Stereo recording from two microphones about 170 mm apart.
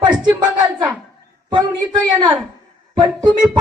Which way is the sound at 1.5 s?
25° right (ahead or behind).